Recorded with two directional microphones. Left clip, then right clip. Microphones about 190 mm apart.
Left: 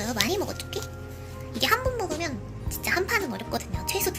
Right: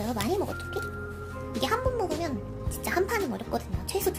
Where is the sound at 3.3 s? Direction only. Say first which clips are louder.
Left 1 dB; 10° right (ahead or behind).